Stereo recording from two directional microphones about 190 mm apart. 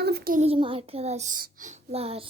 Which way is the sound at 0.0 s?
55° right (ahead or behind).